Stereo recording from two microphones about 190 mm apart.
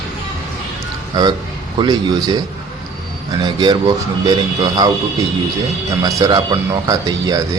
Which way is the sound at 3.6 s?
25° right (ahead or behind).